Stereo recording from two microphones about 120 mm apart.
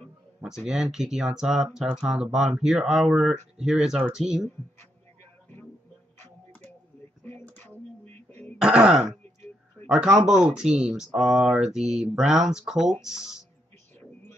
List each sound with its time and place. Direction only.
0.4 s speech: 5° right (ahead or behind)
6.1 s a sound: 15° left (ahead or behind)
8.5 s speech: 5° right (ahead or behind)